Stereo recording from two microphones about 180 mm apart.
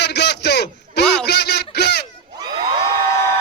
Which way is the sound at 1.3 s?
65° left (ahead or behind).